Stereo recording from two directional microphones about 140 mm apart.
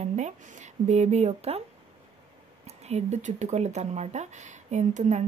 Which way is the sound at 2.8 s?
50° right (ahead or behind).